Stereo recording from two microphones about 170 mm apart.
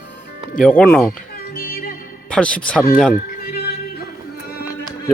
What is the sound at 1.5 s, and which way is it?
Music, 60° left (ahead or behind).